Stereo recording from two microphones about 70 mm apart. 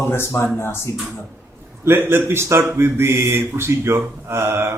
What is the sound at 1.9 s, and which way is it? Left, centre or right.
Speech, right.